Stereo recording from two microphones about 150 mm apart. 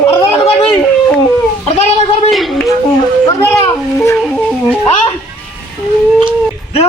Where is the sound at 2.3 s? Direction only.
Centre (ahead or behind).